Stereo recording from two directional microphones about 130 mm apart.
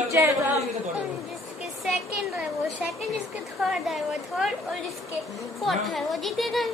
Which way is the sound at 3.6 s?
Centre (ahead or behind).